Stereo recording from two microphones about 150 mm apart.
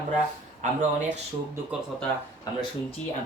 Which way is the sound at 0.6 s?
55° right (ahead or behind).